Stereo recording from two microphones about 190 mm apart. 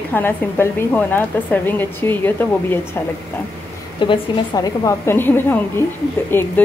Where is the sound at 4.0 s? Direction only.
25° left (ahead or behind).